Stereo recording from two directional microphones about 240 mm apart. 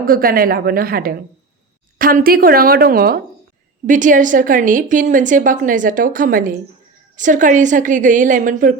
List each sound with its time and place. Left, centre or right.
0.0 s a woman's voice: right